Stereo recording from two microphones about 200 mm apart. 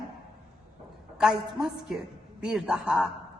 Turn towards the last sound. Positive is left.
turn(degrees=-5)  # may be behind; listen again after turning